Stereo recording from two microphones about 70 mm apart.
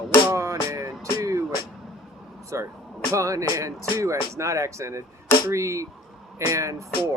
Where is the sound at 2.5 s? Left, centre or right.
Right.